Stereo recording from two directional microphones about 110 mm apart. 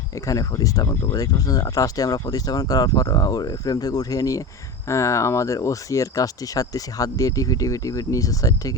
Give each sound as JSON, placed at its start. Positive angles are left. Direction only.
{"t": 0.3, "sound": "speech", "side_deg": 30}